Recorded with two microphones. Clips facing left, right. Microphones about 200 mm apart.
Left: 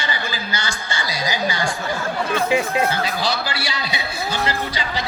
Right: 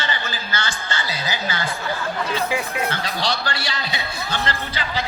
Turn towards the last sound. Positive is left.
turn(degrees=10)  # may be behind; listen again after turning